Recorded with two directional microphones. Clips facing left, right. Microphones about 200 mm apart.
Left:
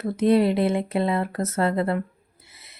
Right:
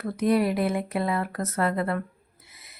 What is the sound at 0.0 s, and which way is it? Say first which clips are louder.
Speech: left 4 dB; 25° left (ahead or behind).